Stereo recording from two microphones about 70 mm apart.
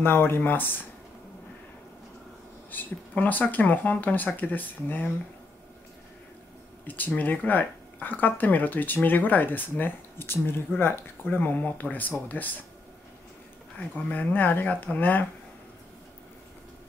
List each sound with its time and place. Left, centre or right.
0.0 s speech: left
2.7 s speech: left
6.9 s speech: left
13.7 s speech: left